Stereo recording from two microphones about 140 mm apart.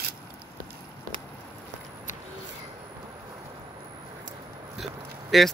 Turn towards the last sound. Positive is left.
turn(degrees=0)  # may be behind; listen again after turning